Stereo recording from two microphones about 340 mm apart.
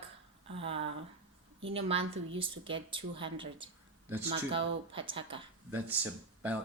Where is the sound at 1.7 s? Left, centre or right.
Centre.